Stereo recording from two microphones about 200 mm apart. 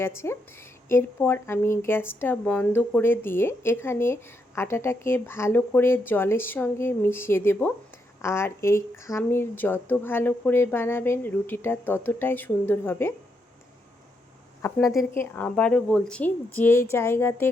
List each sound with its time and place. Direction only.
0.0 s speech: 10° left (ahead or behind)
14.8 s a woman's voice: centre (ahead or behind)
15.1 s speech: 10° left (ahead or behind)